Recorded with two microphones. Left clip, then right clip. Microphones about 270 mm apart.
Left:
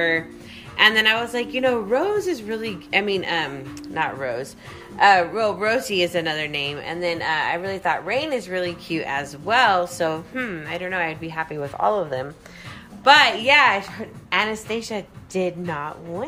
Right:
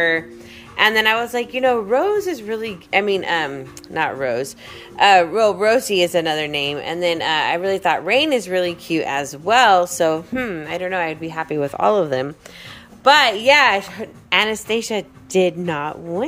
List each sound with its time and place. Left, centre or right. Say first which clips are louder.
0.7 s a woman's voice: right 1 dB; centre; by 12.3 s right
13.0 s speech: right 2 dB; right